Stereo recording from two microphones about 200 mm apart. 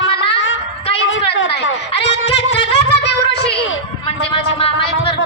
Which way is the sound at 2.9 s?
55° left (ahead or behind).